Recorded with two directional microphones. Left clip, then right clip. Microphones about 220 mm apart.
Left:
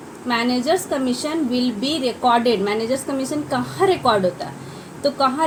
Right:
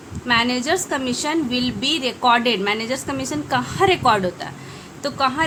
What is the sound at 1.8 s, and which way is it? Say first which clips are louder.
Speech: right 3 dB; 65° right (ahead or behind).